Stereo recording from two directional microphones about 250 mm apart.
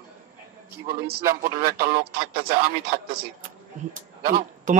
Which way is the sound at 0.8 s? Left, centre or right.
Right.